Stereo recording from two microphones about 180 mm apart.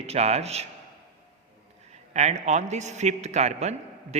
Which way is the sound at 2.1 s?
40° right (ahead or behind).